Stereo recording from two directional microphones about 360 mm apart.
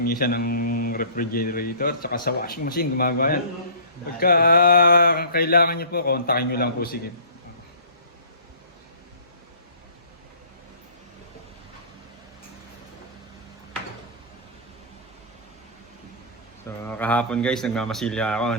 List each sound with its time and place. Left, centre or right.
0.0 s a man's voice: left
16.6 s a man's voice: centre